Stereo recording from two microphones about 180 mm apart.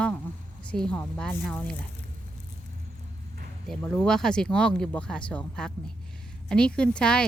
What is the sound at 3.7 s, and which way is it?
Speech, 5° left (ahead or behind).